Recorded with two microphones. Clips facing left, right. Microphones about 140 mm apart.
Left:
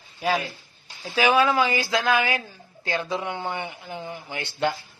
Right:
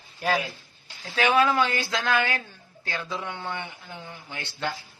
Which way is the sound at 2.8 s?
20° left (ahead or behind).